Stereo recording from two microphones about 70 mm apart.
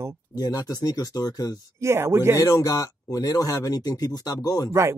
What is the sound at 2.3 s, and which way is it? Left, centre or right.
Speech, left.